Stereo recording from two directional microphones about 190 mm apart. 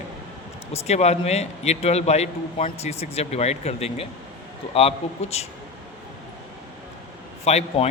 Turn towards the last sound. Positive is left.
turn(degrees=35)  # may be behind; listen again after turning